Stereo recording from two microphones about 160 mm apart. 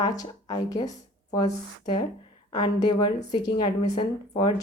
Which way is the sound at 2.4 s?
30° left (ahead or behind).